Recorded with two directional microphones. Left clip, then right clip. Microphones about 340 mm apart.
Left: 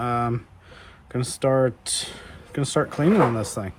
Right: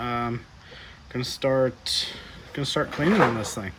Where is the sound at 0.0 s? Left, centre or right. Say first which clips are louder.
Left 4 dB; centre.